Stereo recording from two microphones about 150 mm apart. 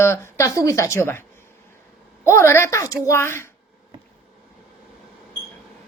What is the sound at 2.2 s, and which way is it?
Speech, 20° left (ahead or behind).